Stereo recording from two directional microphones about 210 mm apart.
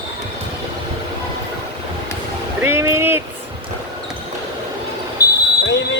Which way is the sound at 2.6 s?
10° right (ahead or behind).